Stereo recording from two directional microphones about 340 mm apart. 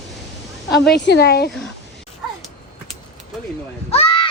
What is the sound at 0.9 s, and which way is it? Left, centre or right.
Speech, left.